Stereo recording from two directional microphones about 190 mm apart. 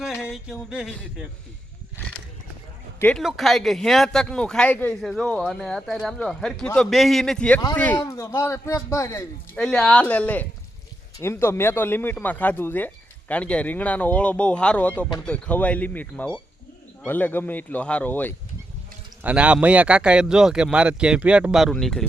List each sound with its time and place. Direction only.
0.7 s speech: 5° right (ahead or behind)
3.0 s speech: 5° left (ahead or behind)
7.9 s speech: 20° left (ahead or behind)
9.6 s speech: 5° left (ahead or behind)
19.2 s speech: 5° right (ahead or behind)